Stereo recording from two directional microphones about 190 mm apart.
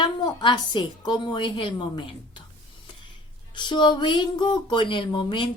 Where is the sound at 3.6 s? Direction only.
25° left (ahead or behind).